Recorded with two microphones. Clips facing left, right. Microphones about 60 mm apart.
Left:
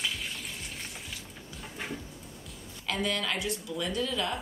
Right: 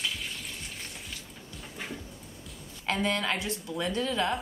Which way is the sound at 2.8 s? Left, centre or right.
Right.